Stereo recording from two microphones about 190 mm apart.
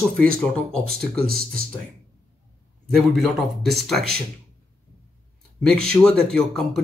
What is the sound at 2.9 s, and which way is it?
Speech, centre (ahead or behind).